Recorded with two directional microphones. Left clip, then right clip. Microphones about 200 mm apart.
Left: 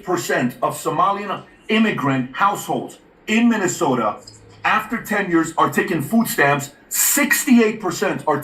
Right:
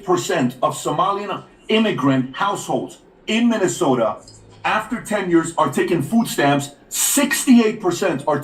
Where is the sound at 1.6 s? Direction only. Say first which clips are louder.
Right 1 dB; 20° left (ahead or behind).